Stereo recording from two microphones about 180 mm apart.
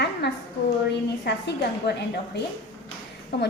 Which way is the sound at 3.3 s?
70° left (ahead or behind).